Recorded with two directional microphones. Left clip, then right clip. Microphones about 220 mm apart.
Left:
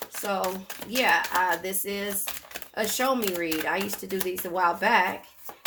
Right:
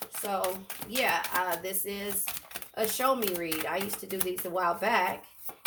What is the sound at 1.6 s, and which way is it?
Speech, 30° left (ahead or behind).